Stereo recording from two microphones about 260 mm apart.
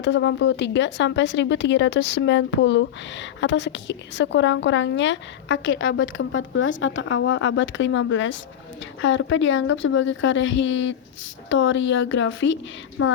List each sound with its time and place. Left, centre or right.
0.0 s a woman's voice: left